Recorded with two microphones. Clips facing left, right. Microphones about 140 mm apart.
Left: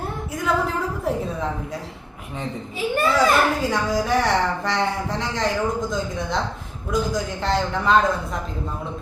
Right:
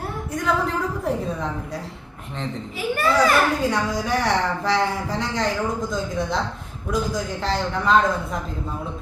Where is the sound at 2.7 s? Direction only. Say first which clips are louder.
Left 2 dB; 20° left (ahead or behind).